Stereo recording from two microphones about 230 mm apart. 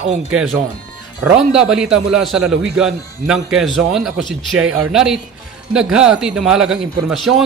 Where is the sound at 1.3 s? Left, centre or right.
Centre.